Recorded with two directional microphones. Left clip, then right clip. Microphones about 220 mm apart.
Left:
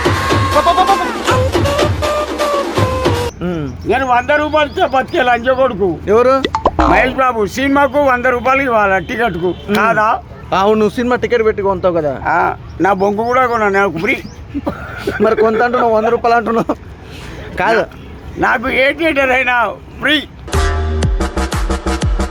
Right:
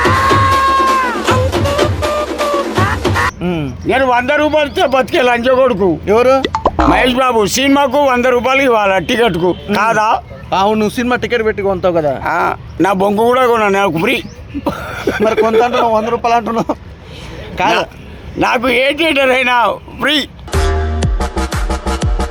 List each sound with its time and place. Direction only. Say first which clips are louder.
0.0 s music: right 4 dB; centre (ahead or behind)
3.8 s a man's voice: right 1 dB; 40° right (ahead or behind)
6.1 s speech: even; centre (ahead or behind)
6.9 s a man's voice: right 1 dB; 50° right (ahead or behind)
10.5 s speech: left 1 dB; 10° left (ahead or behind)
12.2 s a man's voice: left 1 dB; 45° right (ahead or behind)
15.2 s speech: even; 5° left (ahead or behind)
18.3 s a man's voice: right 1 dB; 45° right (ahead or behind)
20.5 s music: left 2 dB; centre (ahead or behind)